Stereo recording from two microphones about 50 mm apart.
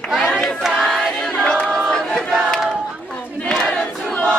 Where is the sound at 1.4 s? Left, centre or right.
Centre.